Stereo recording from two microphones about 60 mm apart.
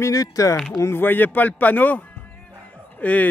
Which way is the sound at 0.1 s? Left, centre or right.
Left.